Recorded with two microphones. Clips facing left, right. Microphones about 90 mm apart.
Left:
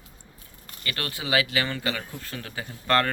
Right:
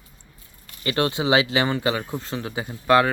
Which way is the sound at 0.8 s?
25° right (ahead or behind).